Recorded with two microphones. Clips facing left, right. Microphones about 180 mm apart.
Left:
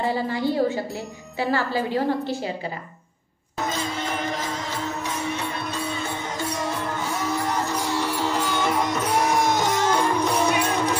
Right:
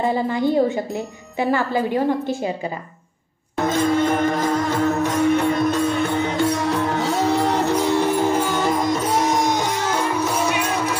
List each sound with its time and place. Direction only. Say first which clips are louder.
0.0 s speech: right 4 dB; 20° right (ahead or behind)
3.5 s music: right 9 dB; 50° right (ahead or behind); by 8.9 s 35° right (ahead or behind)
9.5 s music: even; 10° right (ahead or behind)